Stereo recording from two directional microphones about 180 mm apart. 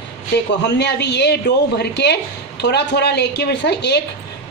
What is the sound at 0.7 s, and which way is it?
Speech, 70° left (ahead or behind).